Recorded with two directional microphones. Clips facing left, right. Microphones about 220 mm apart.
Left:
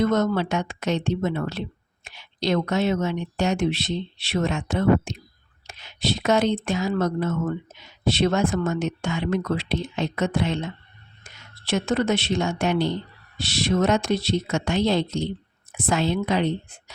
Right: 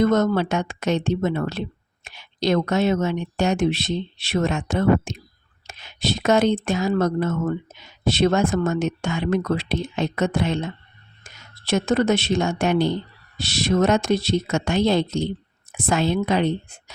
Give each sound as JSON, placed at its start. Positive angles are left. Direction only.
{"t": 0.0, "sound": "speech", "side_deg": -45}